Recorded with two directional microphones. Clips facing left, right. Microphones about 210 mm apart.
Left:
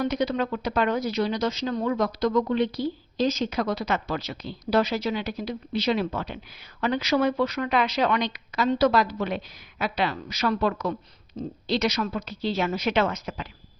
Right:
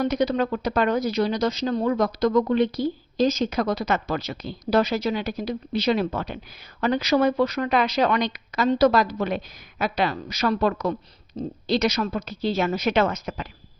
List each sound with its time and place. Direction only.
0.0 s speech: 40° right (ahead or behind)